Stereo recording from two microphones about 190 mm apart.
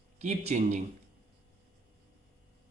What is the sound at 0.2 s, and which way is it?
Speech, 35° right (ahead or behind).